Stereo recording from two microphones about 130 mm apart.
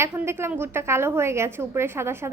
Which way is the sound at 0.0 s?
20° right (ahead or behind).